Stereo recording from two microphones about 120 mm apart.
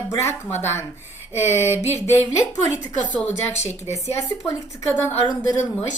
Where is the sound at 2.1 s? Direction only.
35° left (ahead or behind).